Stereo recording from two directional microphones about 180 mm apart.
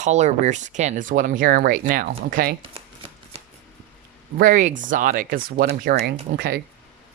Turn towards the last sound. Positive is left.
turn(degrees=-60)  # may be behind; listen again after turning